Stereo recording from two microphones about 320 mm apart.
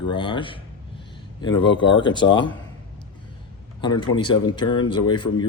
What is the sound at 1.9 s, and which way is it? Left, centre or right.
Speech, left.